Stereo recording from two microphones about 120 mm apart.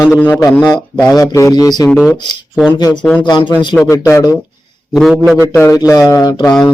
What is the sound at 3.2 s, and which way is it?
Speech, 40° left (ahead or behind).